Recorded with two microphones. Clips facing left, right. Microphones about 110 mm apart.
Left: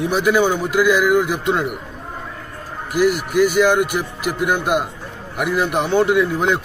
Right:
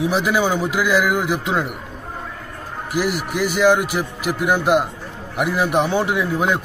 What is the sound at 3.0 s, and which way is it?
Speech, 50° left (ahead or behind).